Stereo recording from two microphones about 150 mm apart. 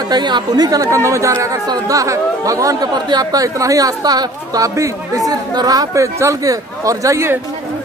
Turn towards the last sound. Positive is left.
turn(degrees=-20)  # may be behind; listen again after turning